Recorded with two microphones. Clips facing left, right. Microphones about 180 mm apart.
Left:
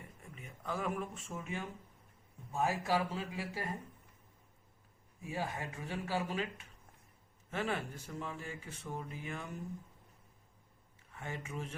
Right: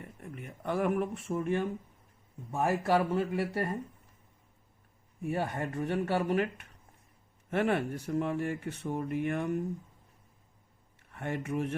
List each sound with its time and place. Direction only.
0.2 s speech: 65° right (ahead or behind)
5.2 s speech: 60° right (ahead or behind)
11.1 s speech: 65° right (ahead or behind)